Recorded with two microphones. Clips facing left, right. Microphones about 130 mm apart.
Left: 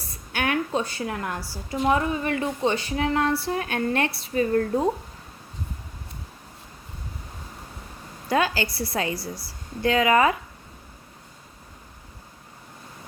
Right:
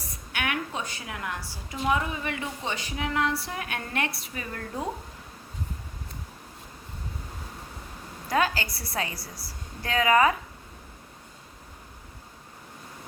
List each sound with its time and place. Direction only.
0.3 s a woman's voice: 35° left (ahead or behind)
8.3 s a woman's voice: 30° left (ahead or behind)